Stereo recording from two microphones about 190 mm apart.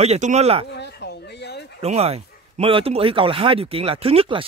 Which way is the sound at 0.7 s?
65° left (ahead or behind).